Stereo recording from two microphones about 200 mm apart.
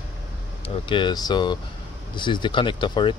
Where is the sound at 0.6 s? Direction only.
25° left (ahead or behind).